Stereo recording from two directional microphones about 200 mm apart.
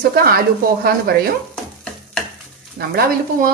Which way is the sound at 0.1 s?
50° right (ahead or behind).